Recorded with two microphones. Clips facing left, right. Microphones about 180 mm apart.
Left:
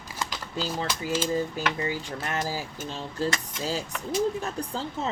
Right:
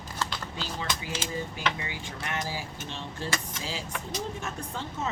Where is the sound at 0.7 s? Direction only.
40° left (ahead or behind).